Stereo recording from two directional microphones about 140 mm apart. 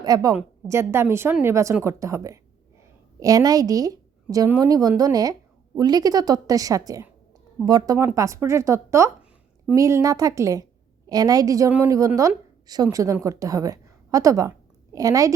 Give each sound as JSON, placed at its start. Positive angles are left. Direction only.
{"t": 0.0, "sound": "a woman's voice", "side_deg": -25}